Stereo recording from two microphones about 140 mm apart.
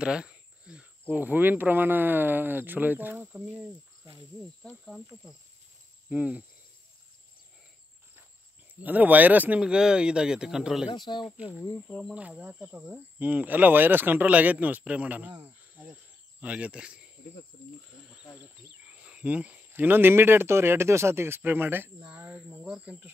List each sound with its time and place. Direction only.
0.0 s speech: 5° right (ahead or behind)
4.4 s speech: centre (ahead or behind)
6.0 s speech: 10° right (ahead or behind)
8.8 s speech: 10° right (ahead or behind)
10.9 s speech: 35° left (ahead or behind)
12.1 s speech: 10° right (ahead or behind)
18.9 s speech: 10° right (ahead or behind)
22.1 s cricket: 15° right (ahead or behind)